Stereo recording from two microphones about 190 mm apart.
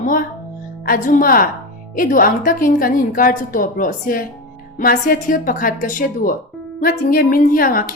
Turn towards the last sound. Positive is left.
turn(degrees=50)  # may be behind; listen again after turning